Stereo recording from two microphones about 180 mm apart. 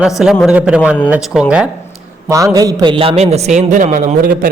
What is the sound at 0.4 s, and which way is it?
Speech, 5° right (ahead or behind).